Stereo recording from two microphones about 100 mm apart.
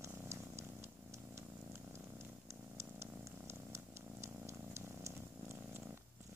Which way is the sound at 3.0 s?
25° right (ahead or behind).